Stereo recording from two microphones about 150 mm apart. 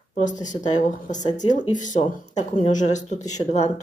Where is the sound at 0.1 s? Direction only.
55° left (ahead or behind).